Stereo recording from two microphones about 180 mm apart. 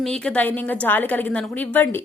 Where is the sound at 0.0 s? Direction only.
5° left (ahead or behind).